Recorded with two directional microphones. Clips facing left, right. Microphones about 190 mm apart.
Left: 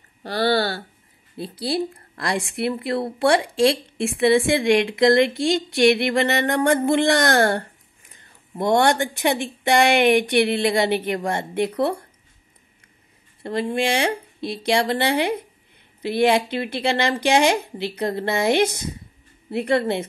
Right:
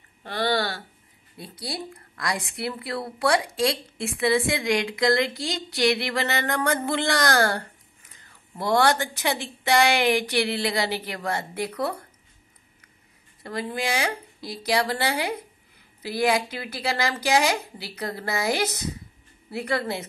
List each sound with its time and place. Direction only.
0.2 s speech: 35° left (ahead or behind)
4.6 s a woman's voice: 25° left (ahead or behind)
13.4 s speech: 25° left (ahead or behind)